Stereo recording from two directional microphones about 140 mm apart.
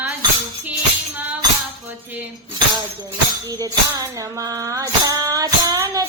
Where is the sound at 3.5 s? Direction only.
25° right (ahead or behind).